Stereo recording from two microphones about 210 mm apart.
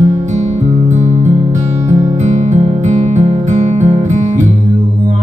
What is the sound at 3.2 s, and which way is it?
Music, 30° right (ahead or behind).